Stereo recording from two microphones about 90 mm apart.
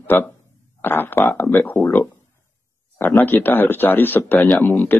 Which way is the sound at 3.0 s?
20° left (ahead or behind).